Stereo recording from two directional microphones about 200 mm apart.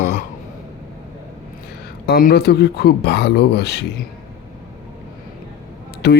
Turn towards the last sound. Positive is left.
turn(degrees=55)  # may be behind; listen again after turning